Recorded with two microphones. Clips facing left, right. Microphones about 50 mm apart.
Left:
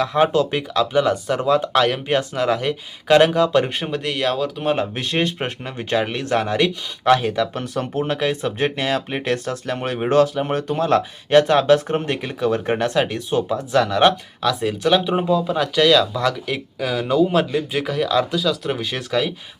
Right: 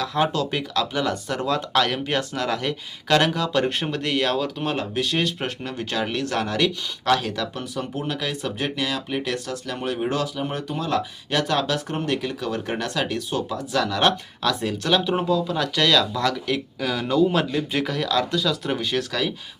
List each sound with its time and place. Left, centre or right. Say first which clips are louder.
0.0 s speech: left 6 dB; left; by 4.7 s centre
4.7 s speech: left 4 dB; left
7.5 s speech: left 5 dB; left
14.4 s speech: left 4 dB; centre
18.9 s speech: left 5 dB; left